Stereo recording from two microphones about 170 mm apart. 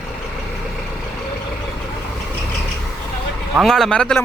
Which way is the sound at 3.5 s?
Centre (ahead or behind).